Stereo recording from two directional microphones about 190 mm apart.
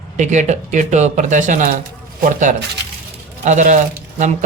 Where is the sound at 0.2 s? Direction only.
40° right (ahead or behind).